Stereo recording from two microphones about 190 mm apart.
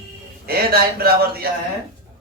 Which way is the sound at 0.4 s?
55° right (ahead or behind).